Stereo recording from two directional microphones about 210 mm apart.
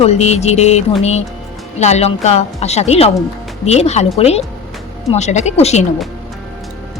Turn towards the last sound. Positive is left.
turn(degrees=30)  # may be behind; listen again after turning